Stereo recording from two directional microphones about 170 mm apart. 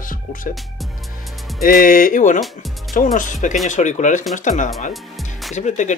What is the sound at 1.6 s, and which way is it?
Speech, 55° left (ahead or behind).